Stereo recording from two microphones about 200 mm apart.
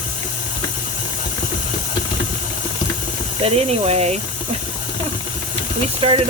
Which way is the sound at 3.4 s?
30° right (ahead or behind).